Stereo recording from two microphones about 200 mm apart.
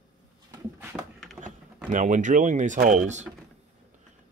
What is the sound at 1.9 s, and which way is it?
Speech, 40° right (ahead or behind).